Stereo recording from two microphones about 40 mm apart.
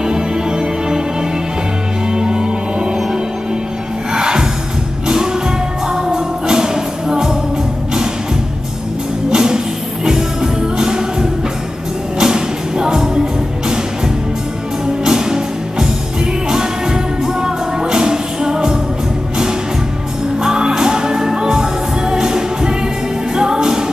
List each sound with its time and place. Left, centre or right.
0.0 s music: centre
2.0 s music: centre
9.3 s music: centre
15.0 s music: centre
20.4 s music: centre